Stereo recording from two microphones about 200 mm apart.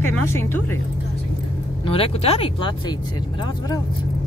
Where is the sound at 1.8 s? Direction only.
30° left (ahead or behind).